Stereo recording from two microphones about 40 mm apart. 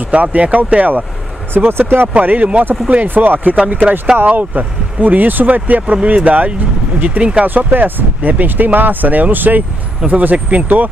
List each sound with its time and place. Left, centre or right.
0.1 s speech: right
1.5 s speech: right
2.1 s speech: right
7.4 s speech: right